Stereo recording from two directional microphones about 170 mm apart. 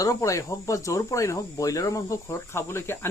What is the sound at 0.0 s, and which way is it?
Speech, 20° left (ahead or behind).